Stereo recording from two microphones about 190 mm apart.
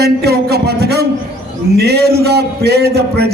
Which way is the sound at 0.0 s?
60° right (ahead or behind).